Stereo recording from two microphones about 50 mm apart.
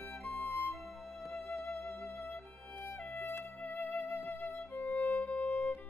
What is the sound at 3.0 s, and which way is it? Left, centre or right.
Music, left.